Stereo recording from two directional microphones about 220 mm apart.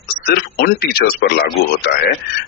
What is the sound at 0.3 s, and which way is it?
Speech, 45° left (ahead or behind).